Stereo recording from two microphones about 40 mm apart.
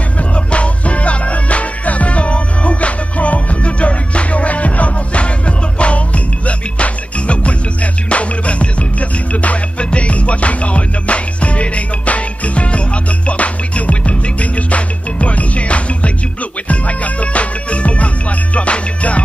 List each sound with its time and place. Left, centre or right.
0.5 s music: left